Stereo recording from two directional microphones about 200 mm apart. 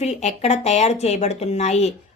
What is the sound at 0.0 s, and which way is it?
A woman's voice, 35° left (ahead or behind).